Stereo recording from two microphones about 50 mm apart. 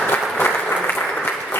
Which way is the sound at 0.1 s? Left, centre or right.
Left.